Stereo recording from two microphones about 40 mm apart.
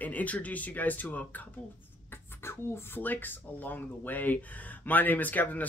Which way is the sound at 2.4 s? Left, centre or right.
Left.